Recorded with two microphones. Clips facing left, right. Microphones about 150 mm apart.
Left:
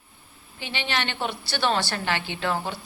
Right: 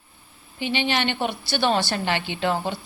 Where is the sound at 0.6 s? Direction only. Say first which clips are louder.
Right 6 dB; 15° right (ahead or behind).